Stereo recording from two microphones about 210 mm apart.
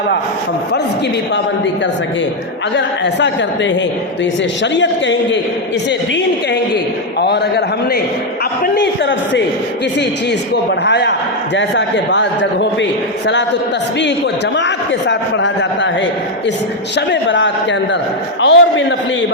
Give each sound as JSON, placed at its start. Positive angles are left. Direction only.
{"t": 2.7, "sound": "a man's voice", "side_deg": 55}
{"t": 7.2, "sound": "a man's voice", "side_deg": 55}
{"t": 10.5, "sound": "a man's voice", "side_deg": 55}
{"t": 14.5, "sound": "a man's voice", "side_deg": 55}
{"t": 17.1, "sound": "a man's voice", "side_deg": 60}